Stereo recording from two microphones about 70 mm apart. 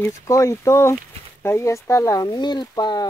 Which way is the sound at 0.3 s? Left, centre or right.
Left.